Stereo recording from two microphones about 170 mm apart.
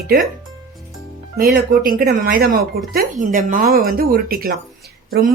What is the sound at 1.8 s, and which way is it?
Speech, 55° right (ahead or behind).